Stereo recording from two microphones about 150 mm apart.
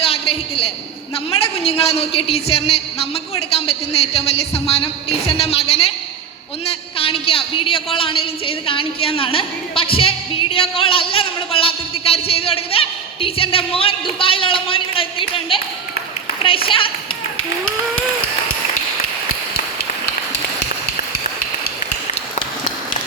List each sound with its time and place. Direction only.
0.0 s a sound: 40° left (ahead or behind)
1.3 s a woman's voice: 40° left (ahead or behind)
7.0 s a woman's voice: 40° left (ahead or behind)
16.6 s a woman's voice: 35° left (ahead or behind)